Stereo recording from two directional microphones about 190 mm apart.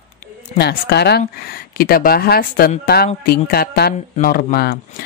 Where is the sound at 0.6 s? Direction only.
60° left (ahead or behind).